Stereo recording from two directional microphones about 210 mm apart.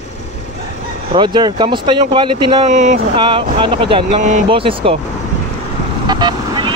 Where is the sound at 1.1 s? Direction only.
20° right (ahead or behind).